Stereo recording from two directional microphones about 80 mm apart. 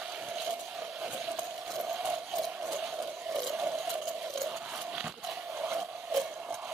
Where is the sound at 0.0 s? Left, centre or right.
Centre.